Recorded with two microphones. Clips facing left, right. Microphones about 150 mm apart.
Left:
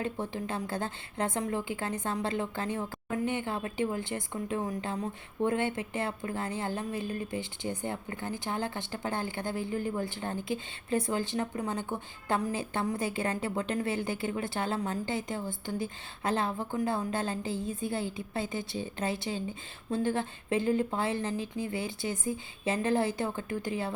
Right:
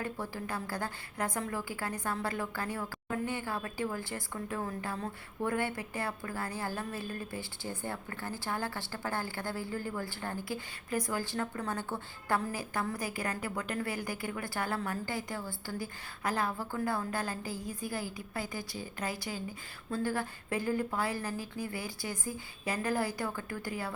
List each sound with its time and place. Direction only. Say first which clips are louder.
0.0 s a woman's voice: left 4 dB; 20° left (ahead or behind)